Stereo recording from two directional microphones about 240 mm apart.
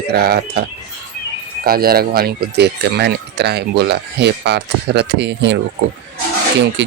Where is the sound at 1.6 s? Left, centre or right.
Right.